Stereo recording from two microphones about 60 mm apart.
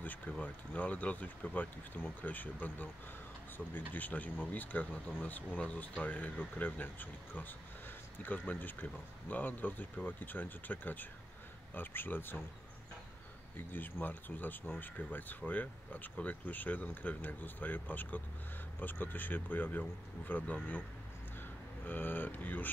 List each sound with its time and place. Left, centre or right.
0.0 s speech: left
3.9 s speech: left
13.6 s speech: left